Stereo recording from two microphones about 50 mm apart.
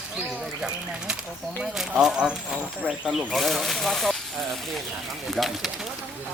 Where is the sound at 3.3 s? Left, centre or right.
Centre.